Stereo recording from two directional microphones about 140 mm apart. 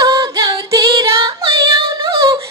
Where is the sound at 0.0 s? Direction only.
30° right (ahead or behind).